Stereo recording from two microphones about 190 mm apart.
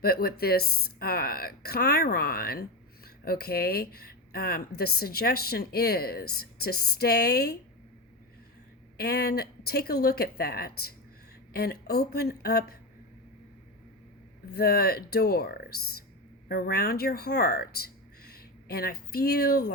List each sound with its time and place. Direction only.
0.0 s speech: 55° left (ahead or behind)
9.0 s speech: 55° left (ahead or behind)
14.5 s speech: 55° left (ahead or behind)